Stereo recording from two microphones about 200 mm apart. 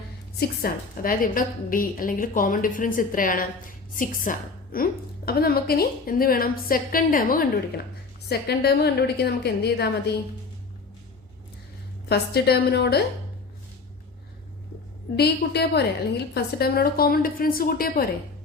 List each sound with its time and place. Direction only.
0.3 s a woman's voice: 45° left (ahead or behind)
12.0 s a woman's voice: 55° left (ahead or behind)
15.1 s a woman's voice: 55° left (ahead or behind)